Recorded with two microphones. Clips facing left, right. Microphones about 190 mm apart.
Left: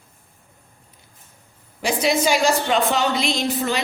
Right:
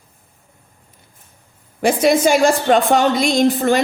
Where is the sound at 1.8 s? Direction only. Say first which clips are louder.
Right 6 dB; 55° right (ahead or behind).